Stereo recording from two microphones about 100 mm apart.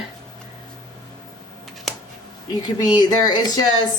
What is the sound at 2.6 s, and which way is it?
Speech, 45° left (ahead or behind).